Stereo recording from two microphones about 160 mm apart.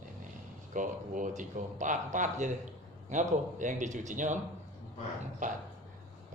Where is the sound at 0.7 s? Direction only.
55° right (ahead or behind).